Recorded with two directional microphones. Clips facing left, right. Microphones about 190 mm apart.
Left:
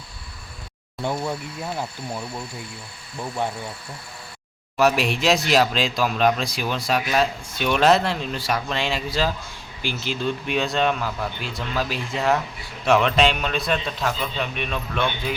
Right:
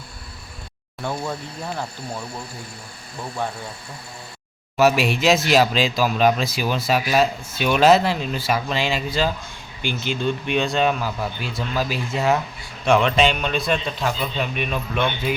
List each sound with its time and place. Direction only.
1.0 s speech: 15° left (ahead or behind)
3.4 s speech: 20° left (ahead or behind)
4.8 s speech: 5° right (ahead or behind)